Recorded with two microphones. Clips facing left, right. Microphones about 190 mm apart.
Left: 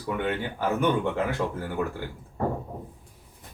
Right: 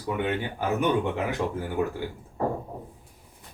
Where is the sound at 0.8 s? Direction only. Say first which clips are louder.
Even; 15° right (ahead or behind).